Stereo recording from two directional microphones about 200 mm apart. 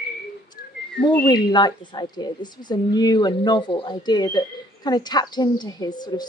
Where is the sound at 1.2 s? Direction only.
20° left (ahead or behind).